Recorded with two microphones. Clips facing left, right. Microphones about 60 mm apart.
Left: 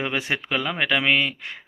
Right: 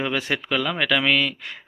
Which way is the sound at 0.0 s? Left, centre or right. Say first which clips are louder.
Right 1 dB; left.